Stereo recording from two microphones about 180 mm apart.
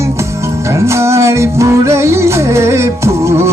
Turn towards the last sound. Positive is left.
turn(degrees=-15)  # may be behind; listen again after turning